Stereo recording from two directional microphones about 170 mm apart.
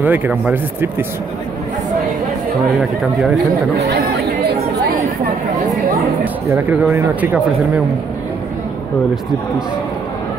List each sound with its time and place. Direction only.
0.0 s speech: 10° right (ahead or behind)
3.0 s speech: centre (ahead or behind)
3.7 s speech: 80° right
6.5 s speech: 15° right (ahead or behind)